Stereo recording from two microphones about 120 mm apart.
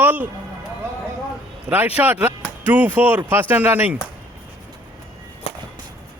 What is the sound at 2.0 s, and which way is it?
Speech, 15° right (ahead or behind).